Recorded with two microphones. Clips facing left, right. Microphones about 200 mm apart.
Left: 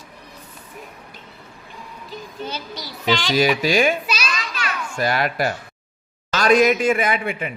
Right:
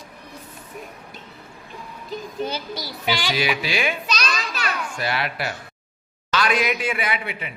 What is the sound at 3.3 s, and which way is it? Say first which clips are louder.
A man's voice: left 7 dB; 40° left (ahead or behind).